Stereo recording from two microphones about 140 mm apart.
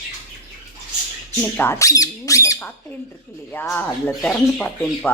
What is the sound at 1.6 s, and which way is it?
Squeak, 20° left (ahead or behind).